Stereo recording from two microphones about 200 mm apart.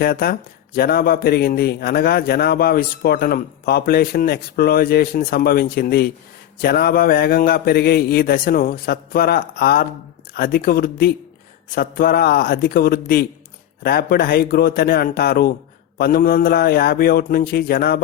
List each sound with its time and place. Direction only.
0.0 s speech: 50° left (ahead or behind)